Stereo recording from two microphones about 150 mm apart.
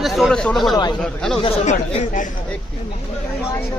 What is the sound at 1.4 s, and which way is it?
Speech, 50° left (ahead or behind).